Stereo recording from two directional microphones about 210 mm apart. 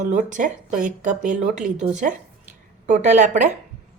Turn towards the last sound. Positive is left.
turn(degrees=-35)  # may be behind; listen again after turning